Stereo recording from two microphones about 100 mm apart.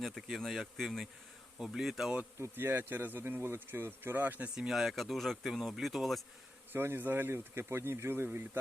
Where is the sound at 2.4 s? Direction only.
20° right (ahead or behind); by 6.2 s centre (ahead or behind).